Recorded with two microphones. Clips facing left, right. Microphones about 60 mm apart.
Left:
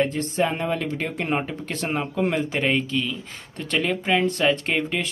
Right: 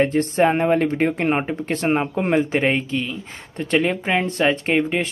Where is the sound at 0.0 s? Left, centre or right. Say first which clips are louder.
Right 5 dB; right.